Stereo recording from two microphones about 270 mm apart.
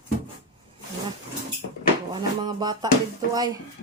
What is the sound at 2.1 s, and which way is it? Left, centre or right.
Speech, centre.